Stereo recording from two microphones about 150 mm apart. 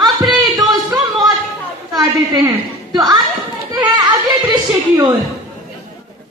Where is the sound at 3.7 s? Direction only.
30° right (ahead or behind).